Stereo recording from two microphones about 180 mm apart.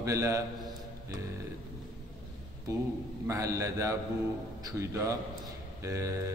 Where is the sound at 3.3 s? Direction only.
15° right (ahead or behind).